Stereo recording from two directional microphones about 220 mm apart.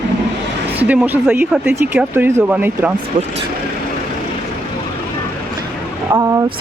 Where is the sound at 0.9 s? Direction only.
5° right (ahead or behind).